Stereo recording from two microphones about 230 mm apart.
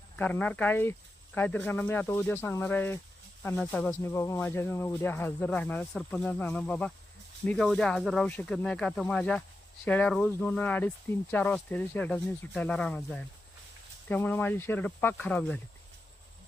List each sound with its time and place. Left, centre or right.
0.2 s speech: centre